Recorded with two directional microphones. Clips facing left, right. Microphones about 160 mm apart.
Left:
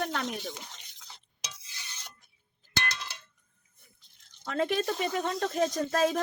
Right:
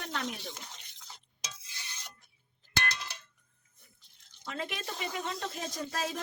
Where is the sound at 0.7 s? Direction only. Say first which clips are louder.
Even; 5° right (ahead or behind).